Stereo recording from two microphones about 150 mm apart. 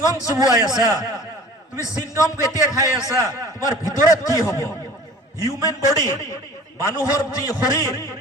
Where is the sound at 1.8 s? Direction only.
20° left (ahead or behind).